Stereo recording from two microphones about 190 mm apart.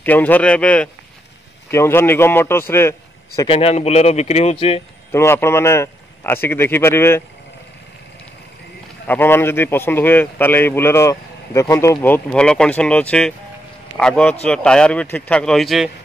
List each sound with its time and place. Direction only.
0.0 s a man's voice: 10° left (ahead or behind)
3.4 s speech: 30° left (ahead or behind)
5.1 s a man's voice: 15° left (ahead or behind)
9.0 s a man's voice: 10° left (ahead or behind)